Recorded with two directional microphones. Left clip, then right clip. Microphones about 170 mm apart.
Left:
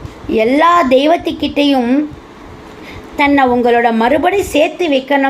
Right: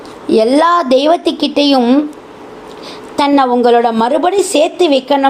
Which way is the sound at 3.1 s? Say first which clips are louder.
Even; 30° right (ahead or behind).